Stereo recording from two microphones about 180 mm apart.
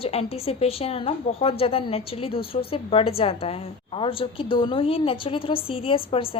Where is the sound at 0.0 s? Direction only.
35° left (ahead or behind).